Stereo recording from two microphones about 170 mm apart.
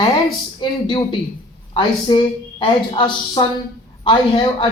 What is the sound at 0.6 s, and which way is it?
A man's voice, 25° left (ahead or behind).